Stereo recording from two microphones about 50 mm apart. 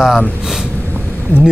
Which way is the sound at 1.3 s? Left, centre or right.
Left.